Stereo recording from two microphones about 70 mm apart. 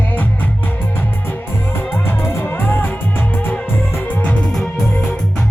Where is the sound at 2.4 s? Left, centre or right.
Left.